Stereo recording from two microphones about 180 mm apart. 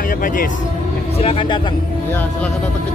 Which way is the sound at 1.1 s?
30° left (ahead or behind).